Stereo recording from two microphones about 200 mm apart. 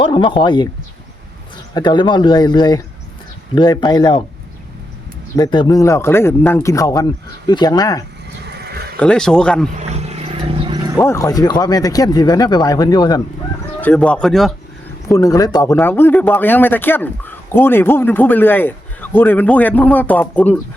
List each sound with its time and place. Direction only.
0.0 s speech: 25° left (ahead or behind)
1.7 s speech: 20° left (ahead or behind)
5.4 s speech: 20° left (ahead or behind)
8.4 s wild animals: 55° right (ahead or behind)
9.0 s speech: 5° left (ahead or behind)
9.7 s roaring cats: 30° right (ahead or behind)
10.9 s speech: 15° left (ahead or behind)
13.8 s speech: 5° left (ahead or behind)
15.0 s speech: 15° left (ahead or behind)